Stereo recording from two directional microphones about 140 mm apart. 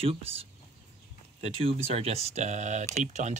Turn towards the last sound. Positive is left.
turn(degrees=-60)  # may be behind; listen again after turning